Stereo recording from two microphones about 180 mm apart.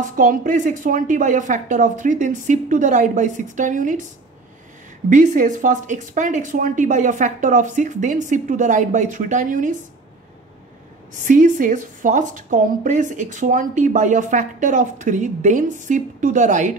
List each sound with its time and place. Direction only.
0.1 s a woman's voice: 50° right (ahead or behind)
5.1 s a woman's voice: 45° right (ahead or behind)
11.2 s a woman's voice: 45° right (ahead or behind)